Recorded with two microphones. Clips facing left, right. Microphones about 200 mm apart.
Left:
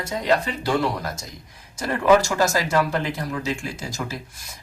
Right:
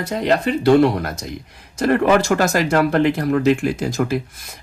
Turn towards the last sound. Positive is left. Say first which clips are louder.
# right 11 dB
turn(degrees=-60)  # may be behind; listen again after turning